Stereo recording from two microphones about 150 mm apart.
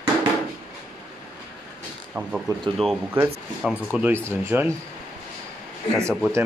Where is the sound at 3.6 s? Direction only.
10° right (ahead or behind).